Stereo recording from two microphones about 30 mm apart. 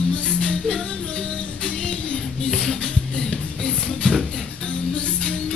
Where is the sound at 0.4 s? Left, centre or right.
Left.